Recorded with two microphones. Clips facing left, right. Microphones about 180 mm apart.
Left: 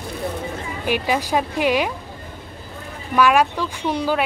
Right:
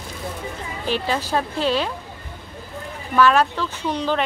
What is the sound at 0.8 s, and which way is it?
Speech, 10° left (ahead or behind).